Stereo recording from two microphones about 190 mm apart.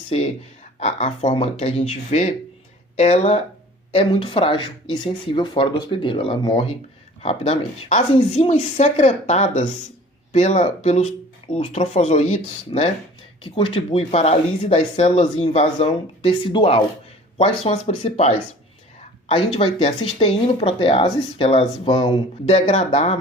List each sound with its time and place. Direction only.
0.1 s speech: 35° left (ahead or behind)
19.5 s speech: 30° left (ahead or behind)